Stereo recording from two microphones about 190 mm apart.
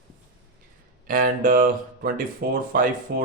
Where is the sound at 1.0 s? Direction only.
45° right (ahead or behind).